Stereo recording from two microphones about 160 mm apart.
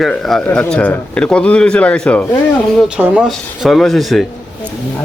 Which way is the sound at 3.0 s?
5° right (ahead or behind).